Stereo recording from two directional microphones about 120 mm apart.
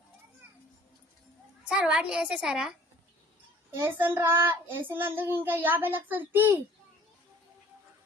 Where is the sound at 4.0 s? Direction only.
15° right (ahead or behind).